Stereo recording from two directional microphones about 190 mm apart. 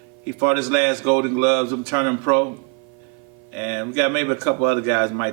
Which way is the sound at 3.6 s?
10° right (ahead or behind).